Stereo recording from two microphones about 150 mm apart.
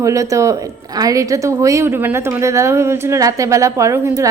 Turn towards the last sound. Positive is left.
turn(degrees=-20)  # may be behind; listen again after turning